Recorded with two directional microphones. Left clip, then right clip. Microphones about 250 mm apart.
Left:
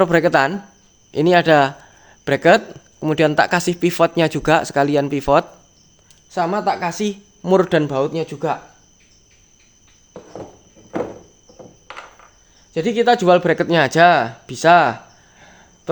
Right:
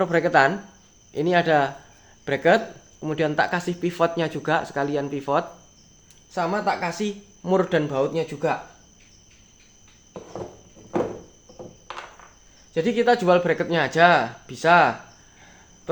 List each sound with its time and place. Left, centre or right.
0.0 s speech: left
12.7 s speech: left
15.4 s cricket: left